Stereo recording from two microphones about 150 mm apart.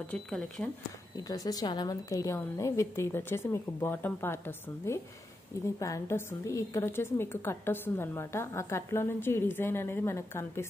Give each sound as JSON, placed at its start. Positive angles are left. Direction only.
{"t": 0.0, "sound": "a woman's voice", "side_deg": 10}
{"t": 1.1, "sound": "a woman's voice", "side_deg": 25}